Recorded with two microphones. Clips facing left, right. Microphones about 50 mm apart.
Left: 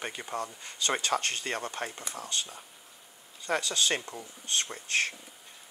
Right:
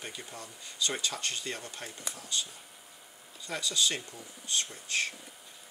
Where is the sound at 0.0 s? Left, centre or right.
Left.